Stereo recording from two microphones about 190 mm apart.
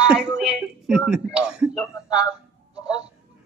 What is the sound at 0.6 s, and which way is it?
Speech, centre (ahead or behind).